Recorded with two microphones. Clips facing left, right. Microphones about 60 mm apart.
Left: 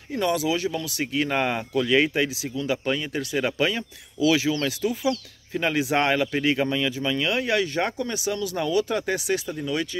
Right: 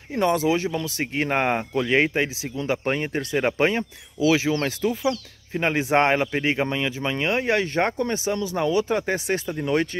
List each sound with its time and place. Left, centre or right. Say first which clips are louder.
0.1 s speech: right 3 dB; right
9.2 s speech: right 1 dB; right